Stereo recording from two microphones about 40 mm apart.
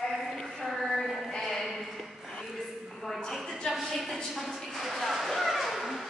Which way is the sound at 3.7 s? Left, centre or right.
Centre.